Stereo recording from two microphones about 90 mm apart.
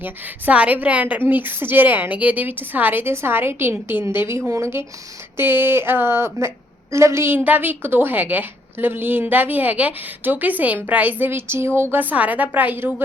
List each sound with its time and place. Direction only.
0.0 s a woman's voice: 15° right (ahead or behind)
7.3 s a woman's voice: 20° right (ahead or behind)